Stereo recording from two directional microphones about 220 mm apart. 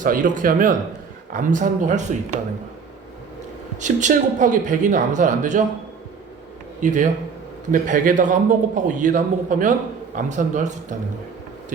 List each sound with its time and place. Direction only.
0.0 s a man's voice: 35° right (ahead or behind)
3.8 s a man's voice: 35° right (ahead or behind)
6.8 s a man's voice: 35° right (ahead or behind)